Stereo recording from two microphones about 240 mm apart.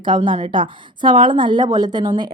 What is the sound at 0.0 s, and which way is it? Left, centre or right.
A woman's voice, centre.